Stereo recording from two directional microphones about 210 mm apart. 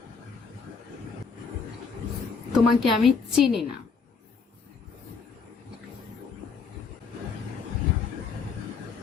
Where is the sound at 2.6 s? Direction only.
Centre (ahead or behind).